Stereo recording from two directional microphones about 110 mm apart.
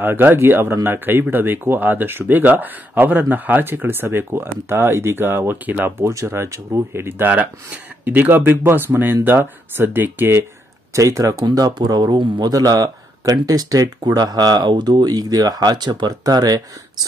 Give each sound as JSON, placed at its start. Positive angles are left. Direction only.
{"t": 0.0, "sound": "speech", "side_deg": -20}
{"t": 11.4, "sound": "speech", "side_deg": -40}